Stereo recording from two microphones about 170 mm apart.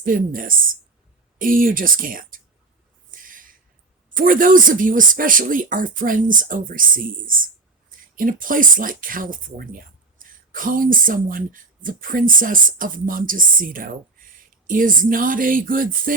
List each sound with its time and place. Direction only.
0.0 s speech: 55° right (ahead or behind)
3.1 s a sound: 55° right (ahead or behind)
4.1 s speech: 55° right (ahead or behind)